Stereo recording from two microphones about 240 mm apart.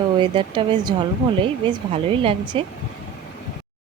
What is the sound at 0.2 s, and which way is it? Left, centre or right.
Speech, centre.